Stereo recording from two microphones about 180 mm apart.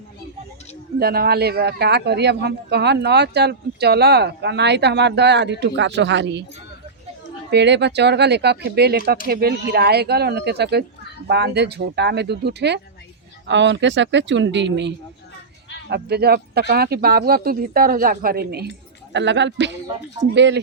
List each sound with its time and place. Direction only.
0.9 s speech: 60° right (ahead or behind); by 6.4 s 75° right (ahead or behind)
7.5 s speech: 75° right (ahead or behind)
13.5 s a woman's voice: 85° right
15.9 s speech: 60° right (ahead or behind)
19.1 s a woman's voice: 80° right